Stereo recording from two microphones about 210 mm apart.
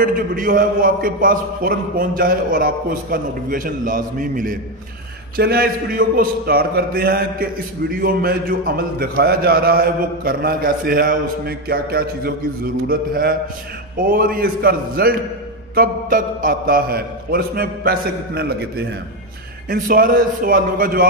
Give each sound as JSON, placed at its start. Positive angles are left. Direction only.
{"t": 0.0, "sound": "a man's voice", "side_deg": -40}